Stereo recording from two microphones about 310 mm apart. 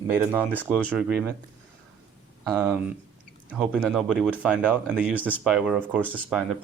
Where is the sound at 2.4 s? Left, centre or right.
Centre.